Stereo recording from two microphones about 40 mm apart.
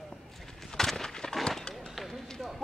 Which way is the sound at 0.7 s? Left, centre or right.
Centre.